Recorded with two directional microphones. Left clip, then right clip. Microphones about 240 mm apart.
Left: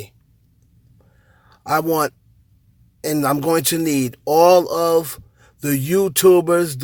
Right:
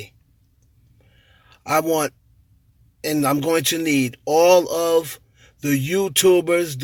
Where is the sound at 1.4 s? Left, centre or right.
Centre.